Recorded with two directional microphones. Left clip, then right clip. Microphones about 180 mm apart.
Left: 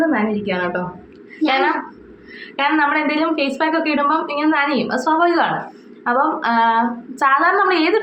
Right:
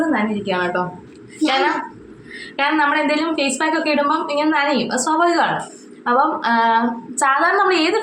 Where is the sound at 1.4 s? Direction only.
15° right (ahead or behind).